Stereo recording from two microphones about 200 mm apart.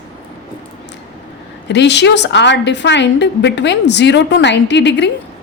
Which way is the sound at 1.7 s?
60° left (ahead or behind).